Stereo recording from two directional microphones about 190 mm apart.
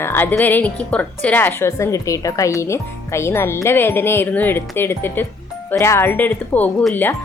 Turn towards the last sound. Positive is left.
turn(degrees=10)  # may be behind; listen again after turning